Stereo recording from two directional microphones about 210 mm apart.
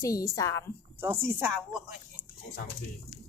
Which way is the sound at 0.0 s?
15° left (ahead or behind).